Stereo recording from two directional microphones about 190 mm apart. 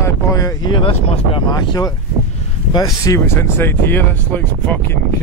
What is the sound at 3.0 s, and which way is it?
Speech, 15° left (ahead or behind).